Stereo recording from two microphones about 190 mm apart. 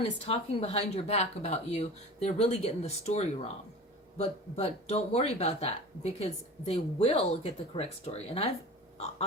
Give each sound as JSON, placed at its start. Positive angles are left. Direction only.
{"t": 0.0, "sound": "speech", "side_deg": 30}